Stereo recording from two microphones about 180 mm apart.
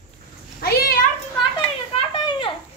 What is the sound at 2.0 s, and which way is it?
Children playing, 30° left (ahead or behind).